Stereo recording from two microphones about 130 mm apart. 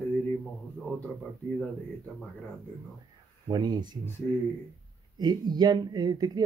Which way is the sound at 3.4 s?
35° right (ahead or behind).